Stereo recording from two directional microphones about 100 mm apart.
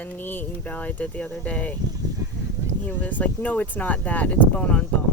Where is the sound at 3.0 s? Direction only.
15° left (ahead or behind).